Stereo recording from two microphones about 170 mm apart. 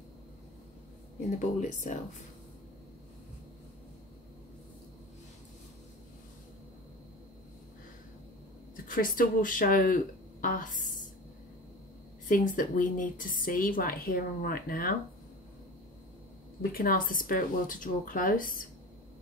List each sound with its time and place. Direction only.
1.6 s a woman's voice: 45° left (ahead or behind)
8.8 s a woman's voice: 55° left (ahead or behind)
12.3 s a woman's voice: 50° left (ahead or behind)
16.7 s a woman's voice: 55° left (ahead or behind)